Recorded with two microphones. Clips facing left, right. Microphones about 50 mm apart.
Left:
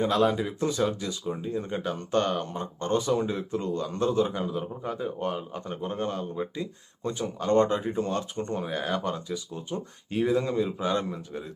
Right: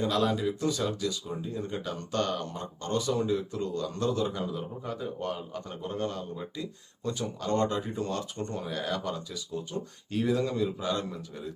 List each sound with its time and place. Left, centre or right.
0.0 s speech: left